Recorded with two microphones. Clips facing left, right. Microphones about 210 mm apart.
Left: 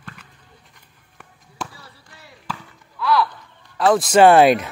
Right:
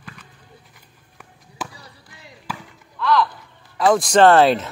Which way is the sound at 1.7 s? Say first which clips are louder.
Right 1 dB; 15° right (ahead or behind).